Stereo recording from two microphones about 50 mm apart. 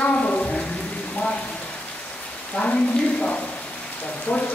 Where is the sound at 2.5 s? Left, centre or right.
Left.